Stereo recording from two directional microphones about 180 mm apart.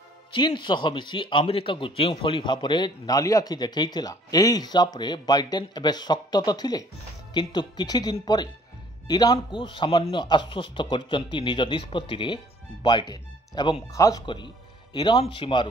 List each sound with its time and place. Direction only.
0.3 s a man's voice: 25° left (ahead or behind)